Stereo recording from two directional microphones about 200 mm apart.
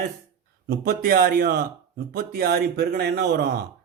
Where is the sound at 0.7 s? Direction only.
45° right (ahead or behind).